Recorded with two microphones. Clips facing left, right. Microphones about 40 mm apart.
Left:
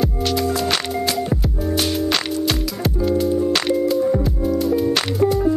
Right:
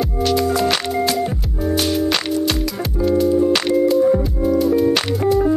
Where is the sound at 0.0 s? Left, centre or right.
Centre.